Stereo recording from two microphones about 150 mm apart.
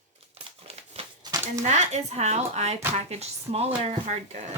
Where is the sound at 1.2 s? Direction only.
25° right (ahead or behind).